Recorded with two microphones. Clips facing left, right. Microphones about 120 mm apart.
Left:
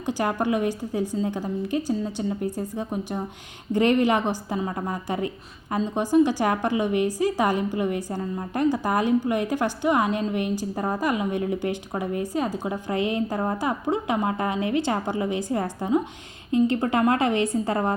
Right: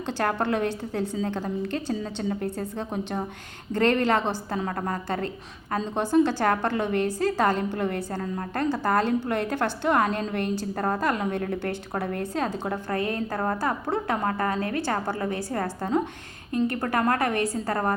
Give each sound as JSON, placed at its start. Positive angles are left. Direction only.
{"t": 0.0, "sound": "a woman's voice", "side_deg": 10}